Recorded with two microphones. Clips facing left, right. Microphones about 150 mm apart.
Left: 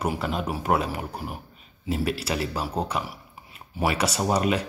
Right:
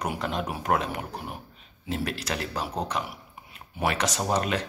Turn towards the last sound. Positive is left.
turn(degrees=10)  # may be behind; listen again after turning